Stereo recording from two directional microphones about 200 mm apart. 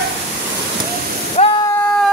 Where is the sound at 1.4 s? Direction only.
35° left (ahead or behind).